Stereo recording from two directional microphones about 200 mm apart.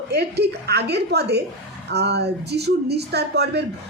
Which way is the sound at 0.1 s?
55° right (ahead or behind).